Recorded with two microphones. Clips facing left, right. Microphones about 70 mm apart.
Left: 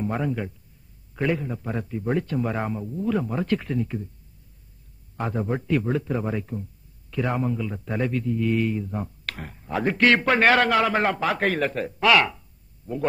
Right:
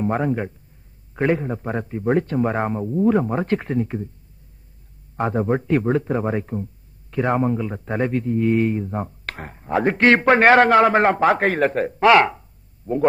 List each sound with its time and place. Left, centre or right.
0.0 s a man's voice: right
5.1 s a man's voice: right